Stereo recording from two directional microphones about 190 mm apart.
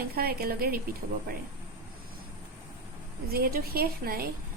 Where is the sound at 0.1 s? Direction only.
55° right (ahead or behind).